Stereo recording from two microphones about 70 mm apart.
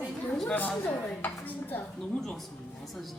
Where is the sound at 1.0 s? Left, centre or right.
Centre.